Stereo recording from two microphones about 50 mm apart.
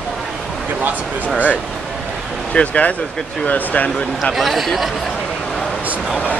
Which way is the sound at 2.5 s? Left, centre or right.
Left.